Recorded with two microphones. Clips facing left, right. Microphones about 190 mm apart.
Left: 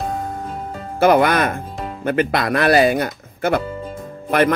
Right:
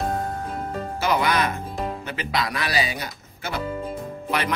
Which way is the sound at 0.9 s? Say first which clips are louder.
Left 9 dB; 55° left (ahead or behind).